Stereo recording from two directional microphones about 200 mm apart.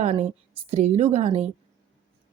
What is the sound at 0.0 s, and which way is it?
A woman's voice, 35° right (ahead or behind).